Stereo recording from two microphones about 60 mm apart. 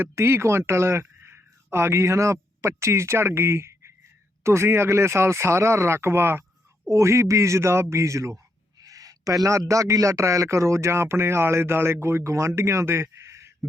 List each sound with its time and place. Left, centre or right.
0.0 s speech: right
6.8 s a man's voice: right
8.8 s a man's voice: right